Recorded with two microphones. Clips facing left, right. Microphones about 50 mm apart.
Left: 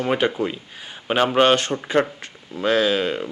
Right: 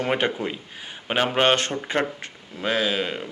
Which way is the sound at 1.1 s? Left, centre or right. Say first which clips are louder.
Left 4 dB; centre.